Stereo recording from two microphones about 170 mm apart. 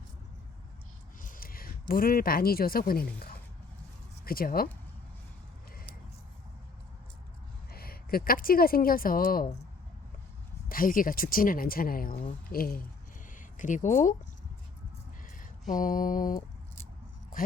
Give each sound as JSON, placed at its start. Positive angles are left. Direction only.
{"t": 1.2, "sound": "speech", "side_deg": 55}
{"t": 7.7, "sound": "speech", "side_deg": 65}
{"t": 10.7, "sound": "speech", "side_deg": 55}
{"t": 13.3, "sound": "speech", "side_deg": 50}
{"t": 15.4, "sound": "a sound", "side_deg": 50}